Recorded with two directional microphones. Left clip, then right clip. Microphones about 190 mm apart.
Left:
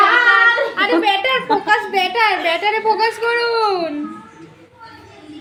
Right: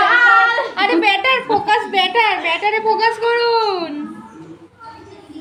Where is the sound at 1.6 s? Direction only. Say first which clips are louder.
Right 1 dB; 30° right (ahead or behind).